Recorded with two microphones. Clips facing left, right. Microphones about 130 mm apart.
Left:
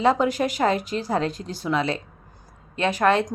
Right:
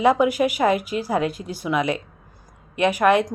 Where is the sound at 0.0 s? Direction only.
10° right (ahead or behind).